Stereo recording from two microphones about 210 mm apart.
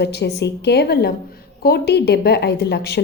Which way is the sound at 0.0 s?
55° left (ahead or behind).